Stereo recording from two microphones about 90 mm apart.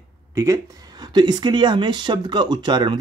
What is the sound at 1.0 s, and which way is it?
Speech, 50° right (ahead or behind).